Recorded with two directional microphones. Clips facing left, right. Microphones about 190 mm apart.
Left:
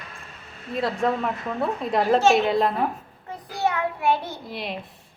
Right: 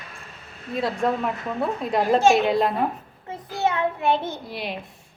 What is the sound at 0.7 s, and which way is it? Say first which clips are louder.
A woman's voice: even; centre (ahead or behind).